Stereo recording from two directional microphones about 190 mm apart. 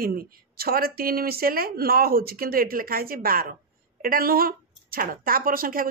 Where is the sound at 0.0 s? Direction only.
50° right (ahead or behind).